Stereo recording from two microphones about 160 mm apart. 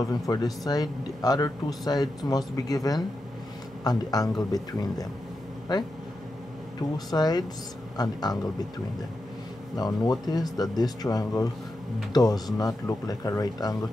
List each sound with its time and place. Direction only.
0.0 s a man's voice: 25° left (ahead or behind)
7.1 s a man's voice: 25° left (ahead or behind)
9.8 s a man's voice: 25° left (ahead or behind)